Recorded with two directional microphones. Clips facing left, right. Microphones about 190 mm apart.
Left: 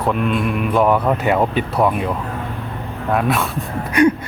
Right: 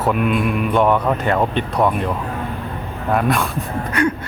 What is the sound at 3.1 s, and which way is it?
Speech, centre (ahead or behind).